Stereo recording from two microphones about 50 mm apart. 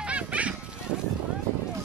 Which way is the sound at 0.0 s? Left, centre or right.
Right.